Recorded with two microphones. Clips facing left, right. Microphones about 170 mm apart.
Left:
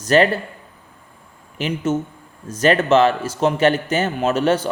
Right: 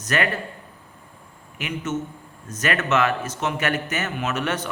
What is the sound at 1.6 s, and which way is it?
A man's voice, 30° left (ahead or behind).